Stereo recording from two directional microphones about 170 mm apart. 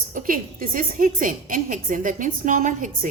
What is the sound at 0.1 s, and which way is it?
A woman's voice, 50° right (ahead or behind).